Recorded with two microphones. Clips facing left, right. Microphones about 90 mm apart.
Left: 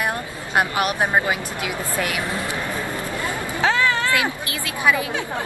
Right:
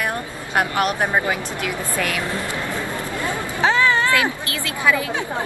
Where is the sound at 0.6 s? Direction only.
15° left (ahead or behind).